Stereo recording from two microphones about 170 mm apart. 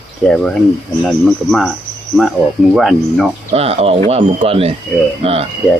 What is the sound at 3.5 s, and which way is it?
Speech, 35° right (ahead or behind).